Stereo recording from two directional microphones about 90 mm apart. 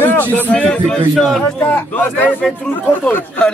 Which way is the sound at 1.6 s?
20° left (ahead or behind).